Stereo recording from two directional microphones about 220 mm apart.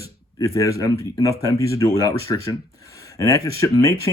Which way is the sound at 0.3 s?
15° left (ahead or behind).